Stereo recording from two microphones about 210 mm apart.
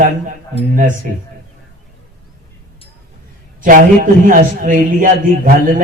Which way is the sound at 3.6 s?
40° right (ahead or behind).